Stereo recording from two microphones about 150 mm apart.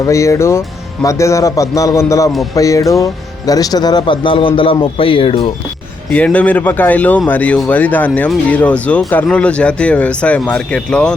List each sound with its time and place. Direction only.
0.0 s speech: 20° left (ahead or behind); by 5.5 s 40° left (ahead or behind)
6.1 s speech: 10° left (ahead or behind)